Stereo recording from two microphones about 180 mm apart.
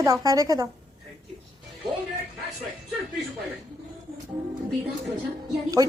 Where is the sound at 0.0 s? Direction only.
20° right (ahead or behind).